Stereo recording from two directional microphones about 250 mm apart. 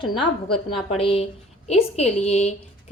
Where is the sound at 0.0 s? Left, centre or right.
Centre.